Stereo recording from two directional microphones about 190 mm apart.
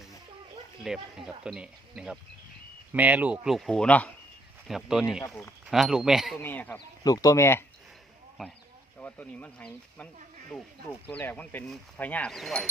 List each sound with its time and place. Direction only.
0.9 s speech: centre (ahead or behind)
6.4 s speech: 10° left (ahead or behind)
8.4 s speech: centre (ahead or behind)
11.1 s speech: 10° left (ahead or behind)